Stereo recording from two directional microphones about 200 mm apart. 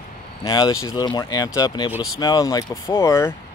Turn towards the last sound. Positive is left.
turn(degrees=15)  # may be behind; listen again after turning